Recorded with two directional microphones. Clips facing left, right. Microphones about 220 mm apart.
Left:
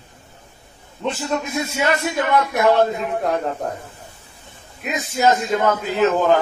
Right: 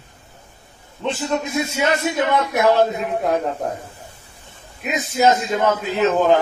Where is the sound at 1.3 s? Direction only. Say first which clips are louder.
Right 2 dB; 20° right (ahead or behind).